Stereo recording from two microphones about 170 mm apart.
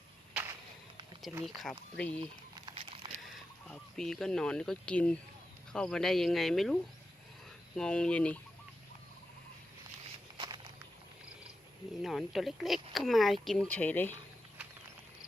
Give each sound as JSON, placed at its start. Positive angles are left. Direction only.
{"t": 1.5, "sound": "speech", "side_deg": 0}
{"t": 2.7, "sound": "a sound", "side_deg": -35}
{"t": 3.7, "sound": "speech", "side_deg": 5}
{"t": 7.8, "sound": "speech", "side_deg": 5}
{"t": 10.3, "sound": "walk", "side_deg": -25}
{"t": 12.0, "sound": "speech", "side_deg": 0}